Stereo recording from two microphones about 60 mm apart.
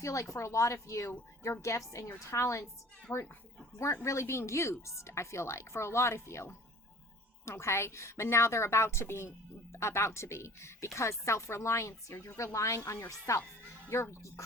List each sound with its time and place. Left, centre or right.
0.0 s speech: left
3.1 s speech: left
13.9 s speech: left